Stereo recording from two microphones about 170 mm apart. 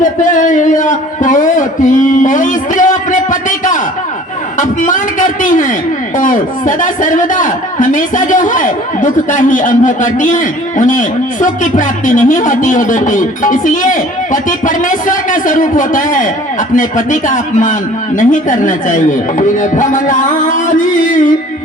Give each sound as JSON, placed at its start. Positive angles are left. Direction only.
{"t": 0.0, "sound": "a man's voice", "side_deg": 50}
{"t": 4.5, "sound": "a sound", "side_deg": 50}
{"t": 6.1, "sound": "a man's voice", "side_deg": 50}